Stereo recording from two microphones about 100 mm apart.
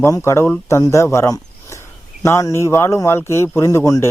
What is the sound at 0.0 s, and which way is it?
A man's voice, 25° left (ahead or behind).